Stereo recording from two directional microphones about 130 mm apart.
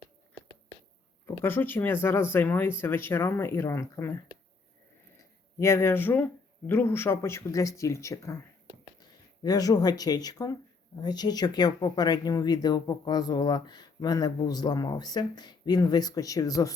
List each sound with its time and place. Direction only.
1.4 s speech: 15° left (ahead or behind)
5.5 s speech: 20° left (ahead or behind)